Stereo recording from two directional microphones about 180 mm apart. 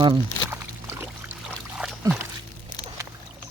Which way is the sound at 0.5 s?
10° right (ahead or behind).